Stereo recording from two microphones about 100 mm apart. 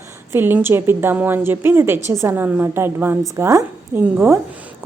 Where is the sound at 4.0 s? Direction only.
20° right (ahead or behind).